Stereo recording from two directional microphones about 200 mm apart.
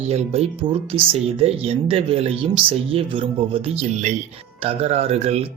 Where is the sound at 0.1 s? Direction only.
30° right (ahead or behind).